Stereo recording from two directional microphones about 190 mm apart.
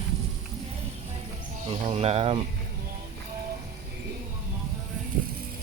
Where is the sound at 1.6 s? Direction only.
30° right (ahead or behind).